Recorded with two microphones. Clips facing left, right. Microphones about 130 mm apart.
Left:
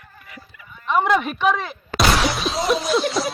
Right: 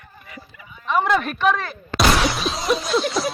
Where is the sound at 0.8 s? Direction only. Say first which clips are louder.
Left 1 dB; 15° left (ahead or behind).